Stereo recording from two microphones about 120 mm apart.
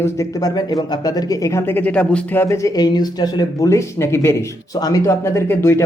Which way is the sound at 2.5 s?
30° left (ahead or behind).